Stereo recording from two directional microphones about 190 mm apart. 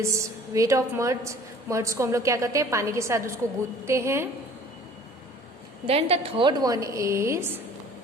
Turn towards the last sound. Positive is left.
turn(degrees=-15)  # may be behind; listen again after turning